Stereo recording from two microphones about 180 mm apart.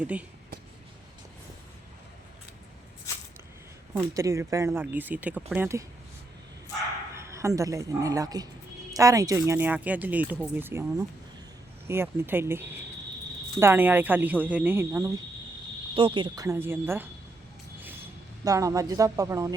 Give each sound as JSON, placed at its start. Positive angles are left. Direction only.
{"t": 0.0, "sound": "speech", "side_deg": -5}
{"t": 3.1, "sound": "a sound", "side_deg": 15}
{"t": 4.1, "sound": "speech", "side_deg": -15}
{"t": 7.2, "sound": "a woman's voice", "side_deg": -15}
{"t": 18.4, "sound": "speech", "side_deg": -20}